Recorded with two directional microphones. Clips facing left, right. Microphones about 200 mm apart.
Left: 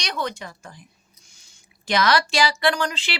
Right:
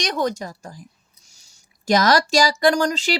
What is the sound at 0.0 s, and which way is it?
A woman's voice, 45° right (ahead or behind).